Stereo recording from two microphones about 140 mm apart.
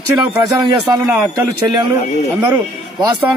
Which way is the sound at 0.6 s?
30° right (ahead or behind).